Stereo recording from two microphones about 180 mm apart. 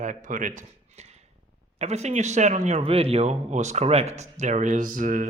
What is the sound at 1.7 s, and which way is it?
Speech, 35° right (ahead or behind).